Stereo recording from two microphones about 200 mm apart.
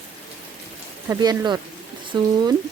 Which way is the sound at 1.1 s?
20° right (ahead or behind).